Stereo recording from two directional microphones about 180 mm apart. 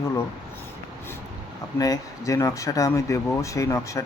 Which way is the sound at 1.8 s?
20° left (ahead or behind).